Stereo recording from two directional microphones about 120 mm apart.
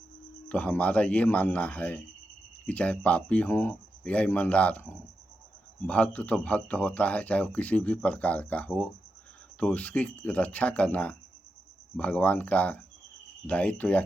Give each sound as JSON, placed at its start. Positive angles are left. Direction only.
{"t": 0.4, "sound": "speech", "side_deg": 10}